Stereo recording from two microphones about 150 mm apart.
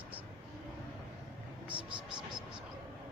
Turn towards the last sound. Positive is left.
turn(degrees=-30)  # may be behind; listen again after turning